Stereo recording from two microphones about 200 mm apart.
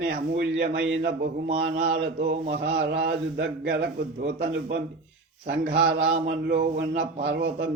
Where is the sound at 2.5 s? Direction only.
55° right (ahead or behind).